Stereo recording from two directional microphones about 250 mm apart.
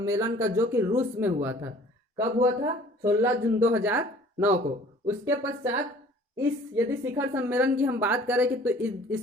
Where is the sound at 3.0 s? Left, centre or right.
Centre.